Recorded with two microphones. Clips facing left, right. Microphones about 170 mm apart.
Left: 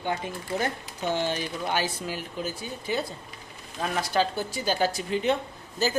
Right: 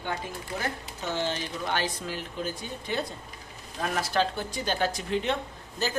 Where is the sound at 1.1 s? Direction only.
15° left (ahead or behind).